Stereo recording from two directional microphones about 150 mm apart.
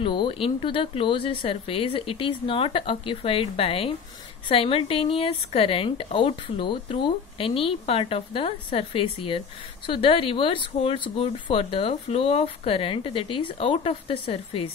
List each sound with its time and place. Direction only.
0.0 s a woman's voice: 35° left (ahead or behind)